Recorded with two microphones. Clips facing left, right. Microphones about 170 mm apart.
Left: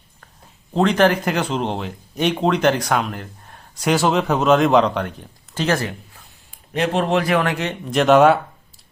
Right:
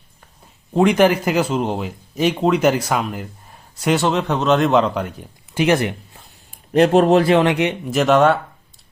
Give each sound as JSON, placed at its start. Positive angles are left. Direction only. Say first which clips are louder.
{"t": 0.7, "sound": "speech", "louder": "right 2 dB", "side_deg": -10}
{"t": 5.5, "sound": "speech", "louder": "right 4 dB", "side_deg": -15}
{"t": 6.7, "sound": "speech", "louder": "right 7 dB", "side_deg": -40}
{"t": 7.9, "sound": "speech", "louder": "left 2 dB", "side_deg": 0}